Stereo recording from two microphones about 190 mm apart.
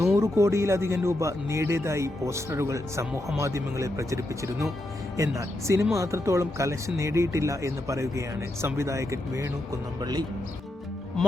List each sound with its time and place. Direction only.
0.0 s speech: 15° right (ahead or behind)